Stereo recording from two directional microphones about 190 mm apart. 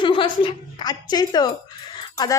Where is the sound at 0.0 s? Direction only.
25° left (ahead or behind).